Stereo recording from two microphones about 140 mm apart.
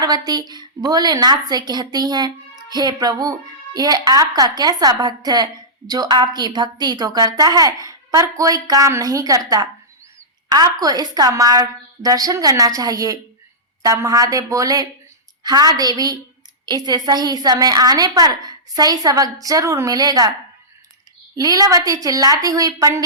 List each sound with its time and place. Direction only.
0.0 s a woman's voice: 30° right (ahead or behind)
21.3 s a woman's voice: 25° right (ahead or behind)